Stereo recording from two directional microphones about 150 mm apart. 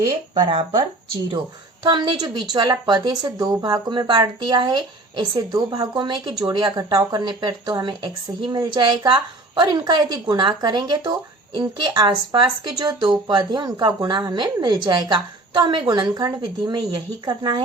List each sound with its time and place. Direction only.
0.4 s speech: 40° right (ahead or behind)
1.8 s speech: 30° right (ahead or behind)